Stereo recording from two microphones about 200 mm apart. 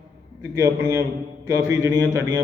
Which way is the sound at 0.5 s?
15° right (ahead or behind).